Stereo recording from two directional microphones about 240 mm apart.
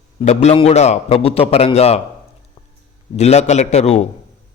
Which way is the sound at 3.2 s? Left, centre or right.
Left.